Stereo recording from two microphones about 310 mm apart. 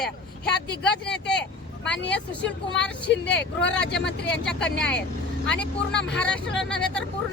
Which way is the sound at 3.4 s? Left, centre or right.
Left.